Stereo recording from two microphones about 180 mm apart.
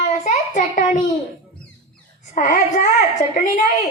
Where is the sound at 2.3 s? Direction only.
45° left (ahead or behind).